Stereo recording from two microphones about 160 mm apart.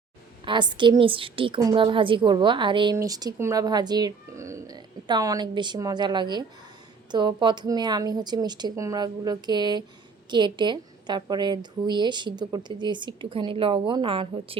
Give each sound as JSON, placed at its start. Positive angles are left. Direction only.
{"t": 0.4, "sound": "a woman's voice", "side_deg": -30}